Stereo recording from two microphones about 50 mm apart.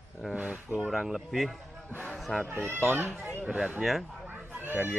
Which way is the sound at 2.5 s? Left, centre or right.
Right.